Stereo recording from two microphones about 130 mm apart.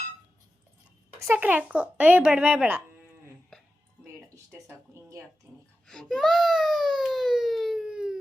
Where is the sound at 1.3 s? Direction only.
10° right (ahead or behind).